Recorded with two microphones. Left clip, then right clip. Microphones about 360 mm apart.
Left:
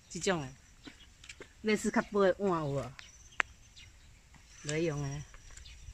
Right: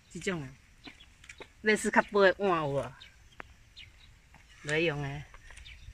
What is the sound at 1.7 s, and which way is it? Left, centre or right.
Speech, right.